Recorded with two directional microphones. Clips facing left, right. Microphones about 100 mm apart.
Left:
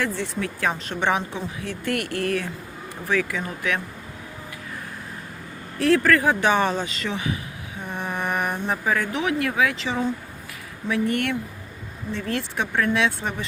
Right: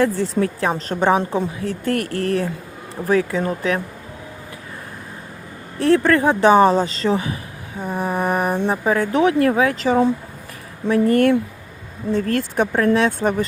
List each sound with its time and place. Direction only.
0.0 s speech: 35° right (ahead or behind)
5.8 s speech: 25° right (ahead or behind)
8.0 s music: 35° right (ahead or behind)
8.6 s speech: 30° right (ahead or behind); by 13.3 s 45° right (ahead or behind)